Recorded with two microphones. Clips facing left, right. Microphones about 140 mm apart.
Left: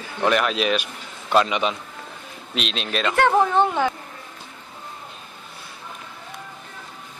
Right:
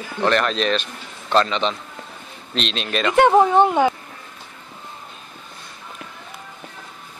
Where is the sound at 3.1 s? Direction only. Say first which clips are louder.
Right 5 dB; 20° right (ahead or behind).